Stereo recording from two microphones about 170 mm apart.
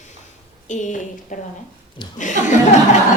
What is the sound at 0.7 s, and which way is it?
A woman's voice, 45° left (ahead or behind).